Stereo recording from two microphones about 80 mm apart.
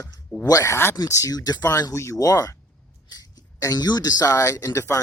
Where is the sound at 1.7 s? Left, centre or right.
Left.